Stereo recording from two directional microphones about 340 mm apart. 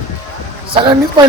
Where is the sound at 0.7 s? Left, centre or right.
Centre.